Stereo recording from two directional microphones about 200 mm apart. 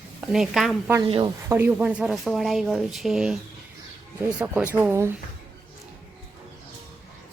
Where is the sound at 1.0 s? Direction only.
25° right (ahead or behind).